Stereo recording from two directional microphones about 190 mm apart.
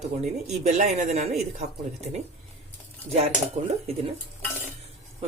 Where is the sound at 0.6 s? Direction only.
35° right (ahead or behind).